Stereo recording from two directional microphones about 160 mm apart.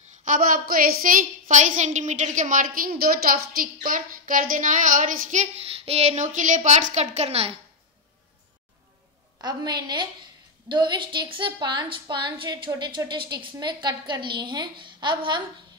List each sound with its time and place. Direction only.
0.2 s a woman's voice: 60° right (ahead or behind); by 7.5 s 40° right (ahead or behind)
9.4 s a woman's voice: 25° right (ahead or behind)